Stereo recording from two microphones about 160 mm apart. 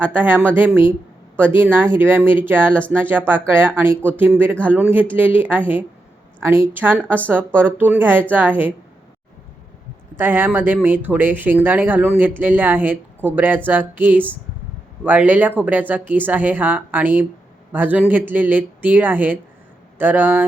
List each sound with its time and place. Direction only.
0.0 s speech: 10° right (ahead or behind)
10.2 s speech: 15° right (ahead or behind)